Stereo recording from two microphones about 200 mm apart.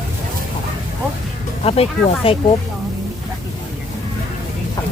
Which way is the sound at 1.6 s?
30° left (ahead or behind).